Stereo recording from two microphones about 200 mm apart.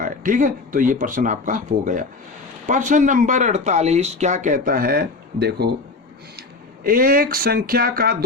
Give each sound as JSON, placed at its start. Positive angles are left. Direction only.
{"t": 0.0, "sound": "speech", "side_deg": -40}
{"t": 6.8, "sound": "speech", "side_deg": -45}